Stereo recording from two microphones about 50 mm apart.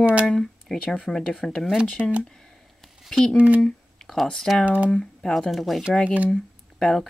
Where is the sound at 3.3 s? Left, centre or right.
Right.